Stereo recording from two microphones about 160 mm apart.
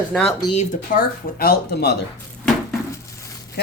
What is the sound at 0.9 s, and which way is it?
Speech, 70° left (ahead or behind).